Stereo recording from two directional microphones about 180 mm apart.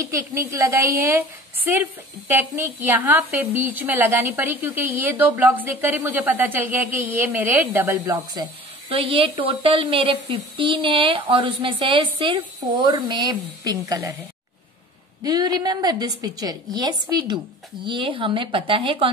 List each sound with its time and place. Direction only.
0.0 s a woman's voice: 15° right (ahead or behind)
8.8 s a woman's voice: 30° right (ahead or behind)
15.2 s a woman's voice: 20° right (ahead or behind)